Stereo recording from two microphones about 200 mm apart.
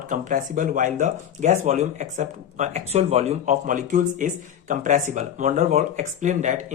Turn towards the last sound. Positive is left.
turn(degrees=-40)  # may be behind; listen again after turning